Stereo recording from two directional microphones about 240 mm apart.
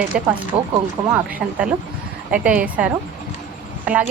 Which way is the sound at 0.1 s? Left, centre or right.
Centre.